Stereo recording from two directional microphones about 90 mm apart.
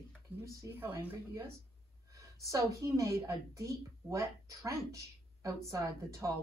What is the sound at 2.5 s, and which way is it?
A woman's voice, 40° right (ahead or behind).